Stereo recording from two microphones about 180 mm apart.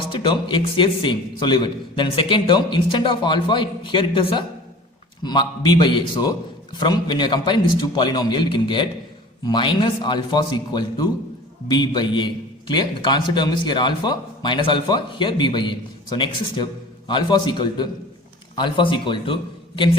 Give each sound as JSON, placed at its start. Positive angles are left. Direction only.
{"t": 0.1, "sound": "a man's voice", "side_deg": 25}